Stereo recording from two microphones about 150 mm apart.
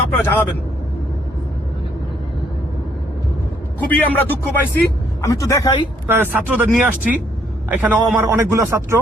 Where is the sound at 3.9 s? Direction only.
10° left (ahead or behind).